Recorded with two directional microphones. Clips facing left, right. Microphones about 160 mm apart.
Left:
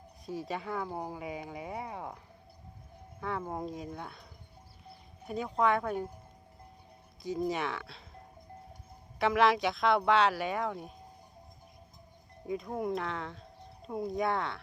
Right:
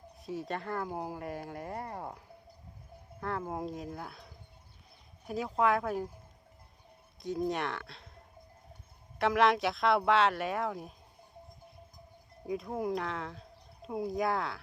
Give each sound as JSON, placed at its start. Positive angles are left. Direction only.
{"t": 0.3, "sound": "speech", "side_deg": 0}
{"t": 3.2, "sound": "speech", "side_deg": 0}
{"t": 7.2, "sound": "speech", "side_deg": 0}
{"t": 12.5, "sound": "speech", "side_deg": 0}